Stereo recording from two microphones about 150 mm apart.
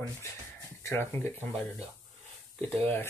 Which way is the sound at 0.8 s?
20° left (ahead or behind).